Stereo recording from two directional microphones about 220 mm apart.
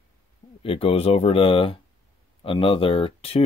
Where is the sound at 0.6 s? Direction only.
25° left (ahead or behind).